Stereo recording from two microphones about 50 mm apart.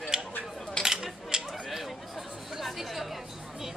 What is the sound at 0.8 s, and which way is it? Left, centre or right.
Dishes, centre.